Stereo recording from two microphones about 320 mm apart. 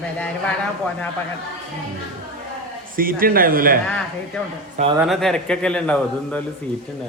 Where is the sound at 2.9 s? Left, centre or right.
Right.